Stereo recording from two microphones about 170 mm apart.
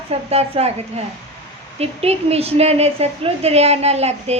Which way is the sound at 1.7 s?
35° right (ahead or behind).